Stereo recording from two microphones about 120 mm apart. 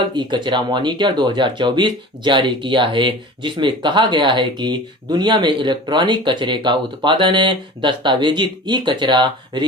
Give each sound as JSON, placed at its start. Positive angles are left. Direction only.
{"t": 0.0, "sound": "speech", "side_deg": -40}